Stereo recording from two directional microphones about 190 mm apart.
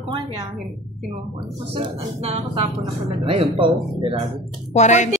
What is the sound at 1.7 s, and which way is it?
A woman's voice, 30° right (ahead or behind).